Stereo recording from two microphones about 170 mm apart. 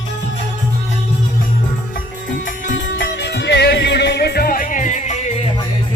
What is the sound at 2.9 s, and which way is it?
Music, 80° left.